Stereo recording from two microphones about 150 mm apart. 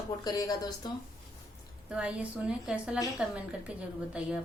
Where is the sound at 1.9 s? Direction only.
5° right (ahead or behind).